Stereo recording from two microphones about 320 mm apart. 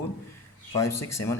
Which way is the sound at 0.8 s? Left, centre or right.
Left.